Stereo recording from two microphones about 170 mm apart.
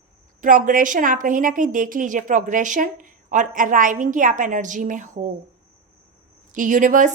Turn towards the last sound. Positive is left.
turn(degrees=-50)  # may be behind; listen again after turning